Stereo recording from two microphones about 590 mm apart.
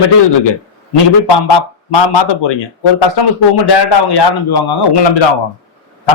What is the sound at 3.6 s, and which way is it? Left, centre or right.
Speech, left.